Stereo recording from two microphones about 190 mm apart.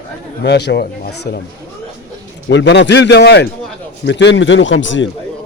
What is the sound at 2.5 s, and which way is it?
A man's voice, 65° left (ahead or behind).